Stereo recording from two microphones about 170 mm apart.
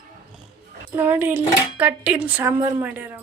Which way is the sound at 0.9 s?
10° right (ahead or behind).